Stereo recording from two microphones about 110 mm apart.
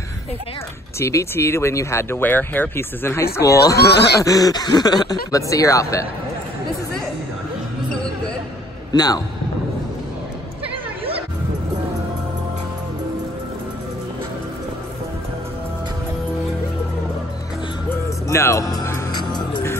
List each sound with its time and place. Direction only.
0.9 s speech: 25° left (ahead or behind)
8.9 s a man's voice: 35° left (ahead or behind)
17.8 s music: 25° left (ahead or behind); by 19.6 s 40° left (ahead or behind)